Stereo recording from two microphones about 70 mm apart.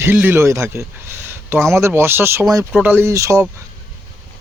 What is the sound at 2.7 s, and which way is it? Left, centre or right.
Speech, right.